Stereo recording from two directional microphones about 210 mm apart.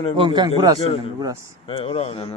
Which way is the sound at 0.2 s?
20° right (ahead or behind).